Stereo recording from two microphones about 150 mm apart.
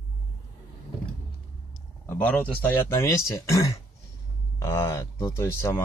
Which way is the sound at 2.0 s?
10° left (ahead or behind).